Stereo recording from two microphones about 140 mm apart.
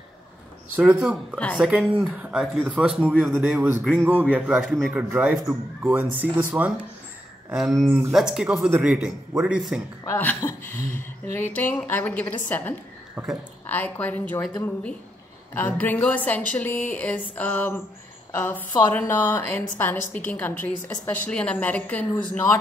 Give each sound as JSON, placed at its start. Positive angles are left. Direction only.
{"t": 0.7, "sound": "speech", "side_deg": -5}
{"t": 1.6, "sound": "speech", "side_deg": -5}
{"t": 7.5, "sound": "speech", "side_deg": 0}
{"t": 10.0, "sound": "a woman's voice", "side_deg": 15}
{"t": 13.1, "sound": "speech", "side_deg": -10}
{"t": 13.7, "sound": "a woman's voice", "side_deg": 10}